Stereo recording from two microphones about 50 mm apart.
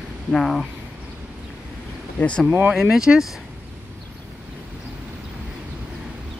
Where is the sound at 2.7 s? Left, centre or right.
Centre.